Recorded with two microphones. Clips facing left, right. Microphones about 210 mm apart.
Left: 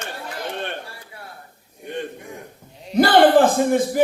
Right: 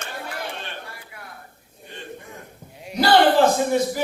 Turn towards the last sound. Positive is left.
turn(degrees=50)  # may be behind; listen again after turning